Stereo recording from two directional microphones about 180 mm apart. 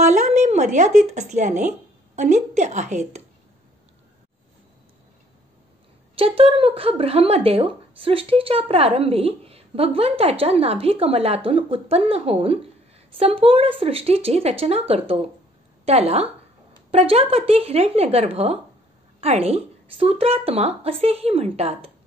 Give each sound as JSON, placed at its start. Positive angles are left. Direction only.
{"t": 0.0, "sound": "speech", "side_deg": -40}
{"t": 6.1, "sound": "a woman's voice", "side_deg": -30}